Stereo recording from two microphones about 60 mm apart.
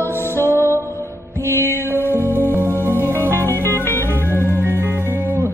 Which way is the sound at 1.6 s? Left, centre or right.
Left.